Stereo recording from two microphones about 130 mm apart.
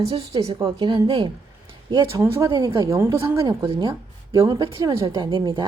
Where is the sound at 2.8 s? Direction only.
25° right (ahead or behind).